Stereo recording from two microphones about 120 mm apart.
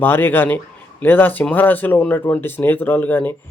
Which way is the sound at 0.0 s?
15° left (ahead or behind).